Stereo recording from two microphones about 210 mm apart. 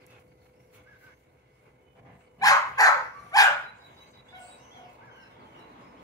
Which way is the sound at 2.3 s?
15° left (ahead or behind).